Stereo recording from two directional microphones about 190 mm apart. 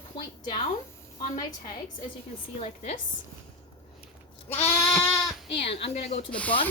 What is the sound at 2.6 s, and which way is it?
Speech, 30° left (ahead or behind).